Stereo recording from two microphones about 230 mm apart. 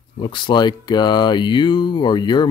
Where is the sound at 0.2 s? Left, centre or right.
Left.